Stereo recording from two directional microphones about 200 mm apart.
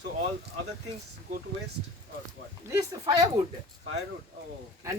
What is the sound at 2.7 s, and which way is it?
Speech, 20° right (ahead or behind).